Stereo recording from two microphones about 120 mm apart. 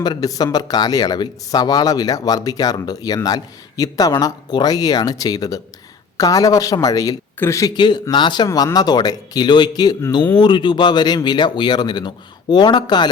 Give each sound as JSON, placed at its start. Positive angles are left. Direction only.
{"t": 0.0, "sound": "a woman's voice", "side_deg": 35}
{"t": 7.8, "sound": "speech", "side_deg": 35}